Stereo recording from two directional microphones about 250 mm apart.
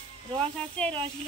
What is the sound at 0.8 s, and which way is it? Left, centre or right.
Speech, centre.